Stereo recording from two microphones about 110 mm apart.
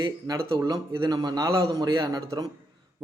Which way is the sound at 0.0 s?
45° right (ahead or behind).